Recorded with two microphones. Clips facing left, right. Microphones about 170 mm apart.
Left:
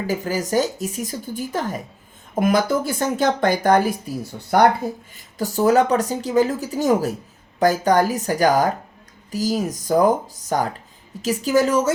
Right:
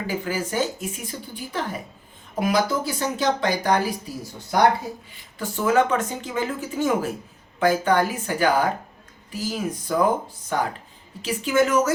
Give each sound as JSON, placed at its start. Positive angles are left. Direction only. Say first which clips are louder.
{"t": 0.1, "sound": "speech", "louder": "left 5 dB", "side_deg": 40}
{"t": 5.1, "sound": "speech", "louder": "left 6 dB", "side_deg": 40}